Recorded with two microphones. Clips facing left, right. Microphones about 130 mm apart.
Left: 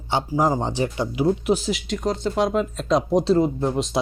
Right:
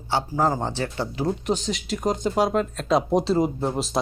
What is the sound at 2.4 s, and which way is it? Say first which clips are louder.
Speech: left 1 dB; centre (ahead or behind).